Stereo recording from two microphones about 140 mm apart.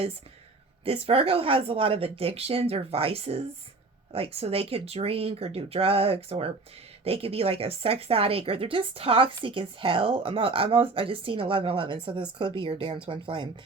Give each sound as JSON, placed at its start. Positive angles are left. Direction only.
{"t": 0.9, "sound": "speech", "side_deg": -45}